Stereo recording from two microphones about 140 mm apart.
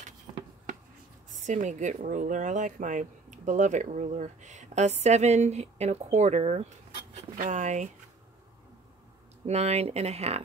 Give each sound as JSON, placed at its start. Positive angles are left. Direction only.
{"t": 1.4, "sound": "speech", "side_deg": -60}
{"t": 7.3, "sound": "speech", "side_deg": -65}
{"t": 9.5, "sound": "speech", "side_deg": -50}